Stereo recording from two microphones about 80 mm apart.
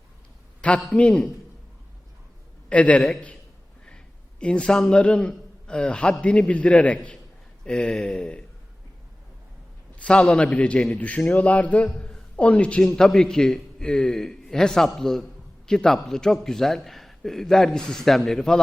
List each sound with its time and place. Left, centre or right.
0.6 s a man's voice: centre
2.6 s a man's voice: centre
9.9 s a man's voice: centre